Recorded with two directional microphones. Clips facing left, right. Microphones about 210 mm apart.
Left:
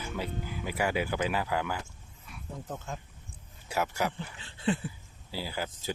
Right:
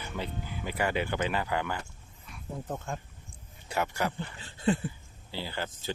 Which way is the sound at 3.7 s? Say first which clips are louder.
Even; 5° left (ahead or behind).